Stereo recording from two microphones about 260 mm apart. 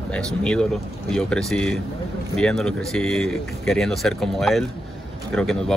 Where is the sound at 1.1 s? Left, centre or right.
Centre.